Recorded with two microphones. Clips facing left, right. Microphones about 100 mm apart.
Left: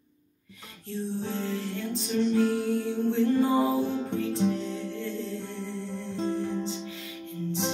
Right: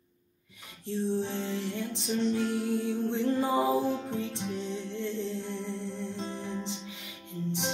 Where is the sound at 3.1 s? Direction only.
25° right (ahead or behind).